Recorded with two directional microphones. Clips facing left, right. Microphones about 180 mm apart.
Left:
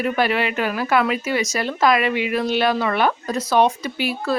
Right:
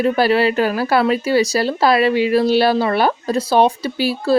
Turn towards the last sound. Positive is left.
turn(degrees=-30)  # may be behind; listen again after turning